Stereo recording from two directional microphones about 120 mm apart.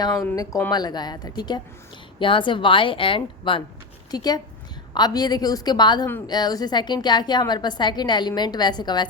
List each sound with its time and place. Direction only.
0.7 s a woman's voice: 35° left (ahead or behind)
4.1 s a woman's voice: 35° left (ahead or behind)